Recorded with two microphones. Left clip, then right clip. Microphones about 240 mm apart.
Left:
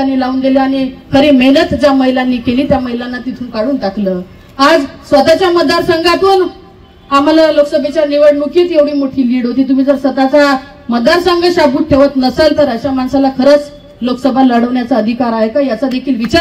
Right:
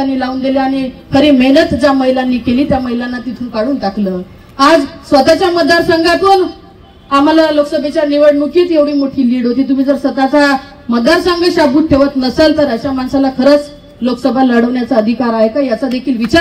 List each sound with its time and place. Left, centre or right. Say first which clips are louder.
0.0 s a man's voice: left 2 dB; left